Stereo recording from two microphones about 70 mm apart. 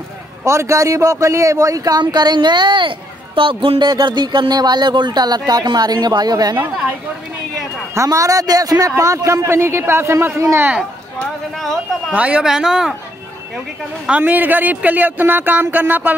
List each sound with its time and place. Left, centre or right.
0.5 s a man's voice: right
2.0 s speech: right
3.8 s a woman's voice: right
7.9 s a man's voice: right
11.5 s speech: centre
12.1 s speech: centre
12.4 s speech: centre
14.0 s speech: right